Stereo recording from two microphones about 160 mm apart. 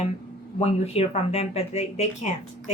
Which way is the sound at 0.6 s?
40° left (ahead or behind).